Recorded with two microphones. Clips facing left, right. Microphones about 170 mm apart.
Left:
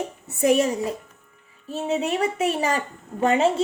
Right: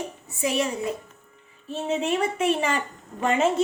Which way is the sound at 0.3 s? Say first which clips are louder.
Left 7 dB; 55° left (ahead or behind).